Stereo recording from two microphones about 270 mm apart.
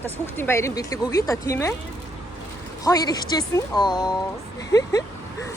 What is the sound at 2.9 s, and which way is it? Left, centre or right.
Speech, centre.